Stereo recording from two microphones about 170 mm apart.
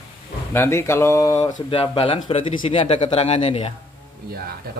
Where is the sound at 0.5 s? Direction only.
15° left (ahead or behind).